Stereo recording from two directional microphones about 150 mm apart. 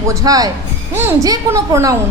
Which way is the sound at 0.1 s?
25° right (ahead or behind).